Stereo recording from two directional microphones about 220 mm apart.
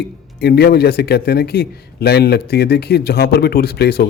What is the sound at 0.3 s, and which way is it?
Speech, 45° left (ahead or behind).